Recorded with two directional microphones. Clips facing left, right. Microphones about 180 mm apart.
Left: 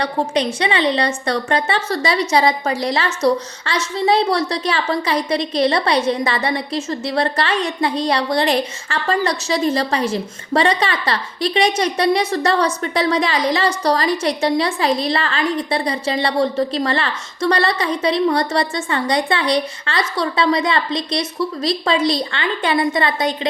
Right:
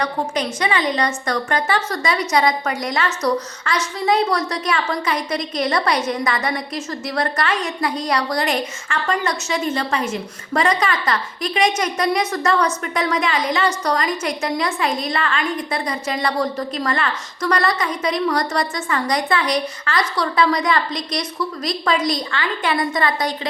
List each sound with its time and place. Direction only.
0.0 s a woman's voice: 30° left (ahead or behind)